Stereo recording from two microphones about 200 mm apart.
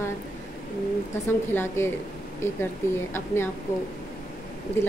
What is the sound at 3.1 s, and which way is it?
Speech, 10° left (ahead or behind).